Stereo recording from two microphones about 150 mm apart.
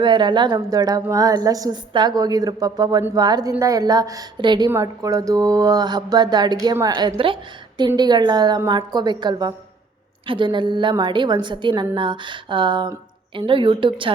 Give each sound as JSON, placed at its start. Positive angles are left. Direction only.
{"t": 0.0, "sound": "a woman's voice", "side_deg": -30}